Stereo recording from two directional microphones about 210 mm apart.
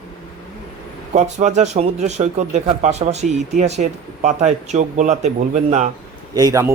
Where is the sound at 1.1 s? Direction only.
35° right (ahead or behind).